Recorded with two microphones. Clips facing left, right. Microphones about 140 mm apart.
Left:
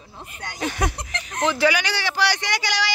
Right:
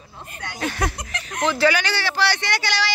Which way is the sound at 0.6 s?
15° left (ahead or behind).